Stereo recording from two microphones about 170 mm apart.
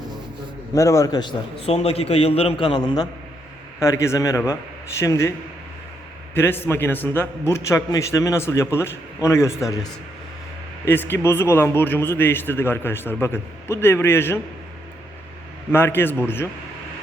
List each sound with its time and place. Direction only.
0.7 s a man's voice: 20° left (ahead or behind)
6.3 s a man's voice: 15° left (ahead or behind)
10.8 s a man's voice: 10° left (ahead or behind)
15.7 s a man's voice: 15° left (ahead or behind)